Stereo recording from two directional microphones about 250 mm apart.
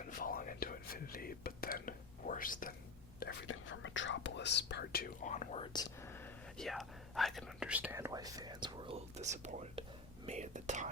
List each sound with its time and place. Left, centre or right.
0.0 s whispering: left
3.2 s speech: left; by 10.8 s right